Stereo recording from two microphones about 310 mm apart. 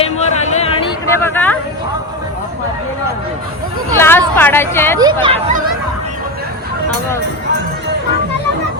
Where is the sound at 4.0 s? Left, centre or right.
Centre.